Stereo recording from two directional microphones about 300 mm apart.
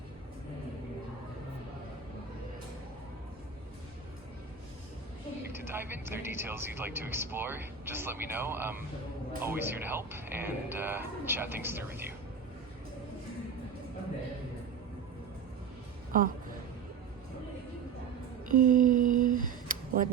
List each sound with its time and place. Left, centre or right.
5.5 s speech: centre
16.1 s a woman's voice: right
18.4 s a sound: right